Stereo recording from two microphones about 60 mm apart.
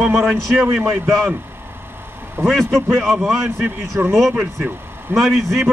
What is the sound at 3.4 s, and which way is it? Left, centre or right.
Speech, right.